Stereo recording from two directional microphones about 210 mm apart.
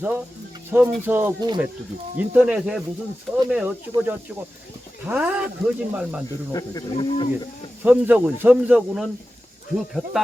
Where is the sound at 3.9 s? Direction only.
10° right (ahead or behind).